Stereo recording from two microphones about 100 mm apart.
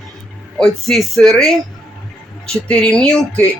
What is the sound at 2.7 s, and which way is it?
Speech, 10° left (ahead or behind).